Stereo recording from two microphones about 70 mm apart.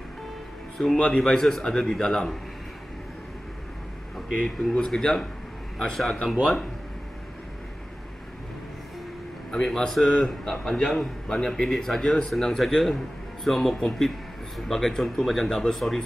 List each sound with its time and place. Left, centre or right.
0.7 s a man's voice: centre
4.7 s a man's voice: centre
9.5 s a man's voice: centre